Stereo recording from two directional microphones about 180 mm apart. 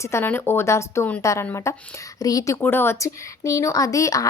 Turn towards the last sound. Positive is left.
turn(degrees=20)  # may be behind; listen again after turning